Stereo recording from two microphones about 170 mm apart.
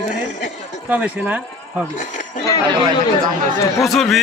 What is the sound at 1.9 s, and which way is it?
Speech, 45° left (ahead or behind).